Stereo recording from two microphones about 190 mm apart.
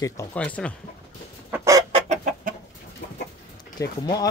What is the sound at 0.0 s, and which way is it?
Speech, 10° left (ahead or behind).